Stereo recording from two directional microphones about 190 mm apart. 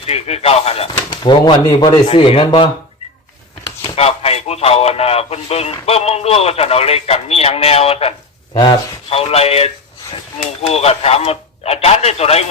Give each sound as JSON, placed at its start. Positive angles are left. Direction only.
{"t": 0.0, "sound": "speech", "side_deg": 35}
{"t": 3.9, "sound": "speech", "side_deg": 30}